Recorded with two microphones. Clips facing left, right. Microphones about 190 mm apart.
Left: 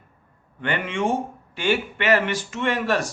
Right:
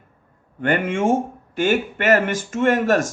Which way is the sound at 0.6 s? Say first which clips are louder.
Right 5 dB; 45° right (ahead or behind).